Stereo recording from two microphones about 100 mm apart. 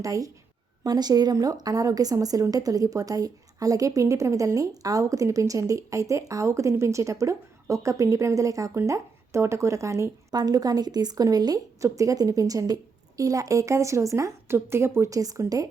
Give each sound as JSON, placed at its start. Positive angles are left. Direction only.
{"t": 0.0, "sound": "a woman's voice", "side_deg": -35}